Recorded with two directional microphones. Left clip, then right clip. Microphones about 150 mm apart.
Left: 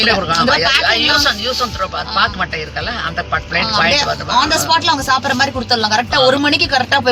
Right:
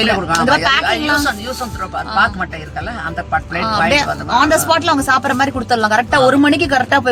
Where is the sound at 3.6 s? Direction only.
70° right (ahead or behind).